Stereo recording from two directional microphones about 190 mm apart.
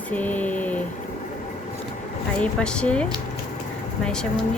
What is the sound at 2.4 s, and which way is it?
Speech, 5° left (ahead or behind).